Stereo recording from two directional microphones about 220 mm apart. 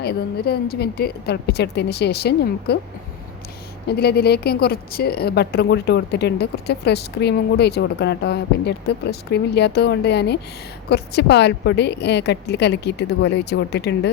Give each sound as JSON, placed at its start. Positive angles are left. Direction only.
{"t": 0.0, "sound": "a woman's voice", "side_deg": 45}
{"t": 3.8, "sound": "a woman's voice", "side_deg": 45}